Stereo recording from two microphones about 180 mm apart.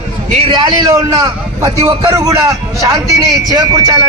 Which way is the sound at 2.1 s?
20° right (ahead or behind).